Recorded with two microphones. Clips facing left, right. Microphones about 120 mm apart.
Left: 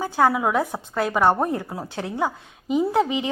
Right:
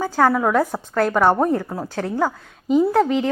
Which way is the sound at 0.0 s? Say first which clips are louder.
Right 2 dB; 10° left (ahead or behind).